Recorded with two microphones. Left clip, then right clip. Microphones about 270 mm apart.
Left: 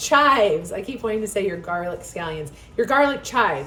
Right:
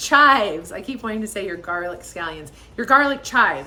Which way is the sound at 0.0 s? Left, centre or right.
Centre.